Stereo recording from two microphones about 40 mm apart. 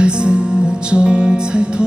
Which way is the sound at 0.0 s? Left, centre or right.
Right.